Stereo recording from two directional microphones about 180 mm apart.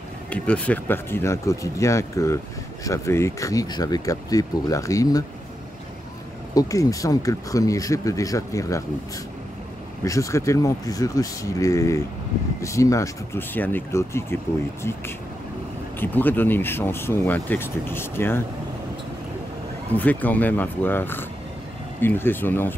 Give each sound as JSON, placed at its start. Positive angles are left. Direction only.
{"t": 0.3, "sound": "speech", "side_deg": 10}
{"t": 6.5, "sound": "speech", "side_deg": 20}
{"t": 10.0, "sound": "speech", "side_deg": 15}
{"t": 20.0, "sound": "speech", "side_deg": 10}